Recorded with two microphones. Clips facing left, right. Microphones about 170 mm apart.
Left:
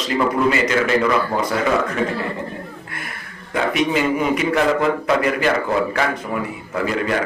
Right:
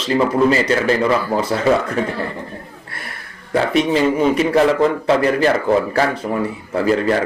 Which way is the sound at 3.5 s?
30° right (ahead or behind).